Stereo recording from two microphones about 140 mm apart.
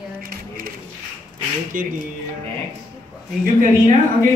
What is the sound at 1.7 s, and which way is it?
Speech, 80° right.